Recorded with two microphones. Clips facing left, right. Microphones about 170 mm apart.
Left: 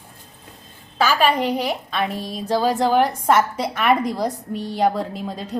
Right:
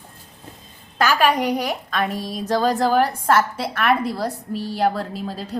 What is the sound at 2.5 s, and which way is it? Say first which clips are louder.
Speech: even; 10° left (ahead or behind).